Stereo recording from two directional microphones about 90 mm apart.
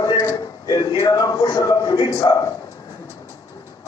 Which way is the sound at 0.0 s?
40° left (ahead or behind).